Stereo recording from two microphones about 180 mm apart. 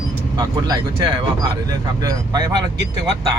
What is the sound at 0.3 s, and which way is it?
Speech, 25° right (ahead or behind).